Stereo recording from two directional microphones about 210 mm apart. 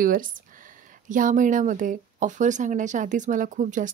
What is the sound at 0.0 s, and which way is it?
Speech, 40° right (ahead or behind).